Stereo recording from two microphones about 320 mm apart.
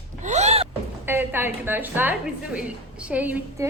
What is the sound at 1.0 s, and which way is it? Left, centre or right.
A woman's voice, centre.